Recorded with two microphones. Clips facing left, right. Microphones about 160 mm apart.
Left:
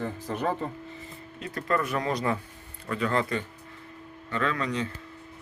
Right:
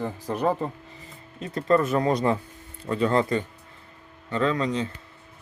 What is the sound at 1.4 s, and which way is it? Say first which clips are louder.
Speech: right 6 dB; 25° right (ahead or behind).